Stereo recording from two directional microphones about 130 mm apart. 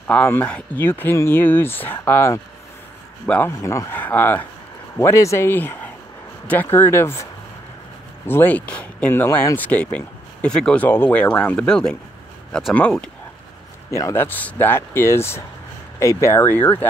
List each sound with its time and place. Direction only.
0.0 s speech: 15° left (ahead or behind)
8.3 s speech: 15° left (ahead or behind)
13.8 s speech: 20° left (ahead or behind)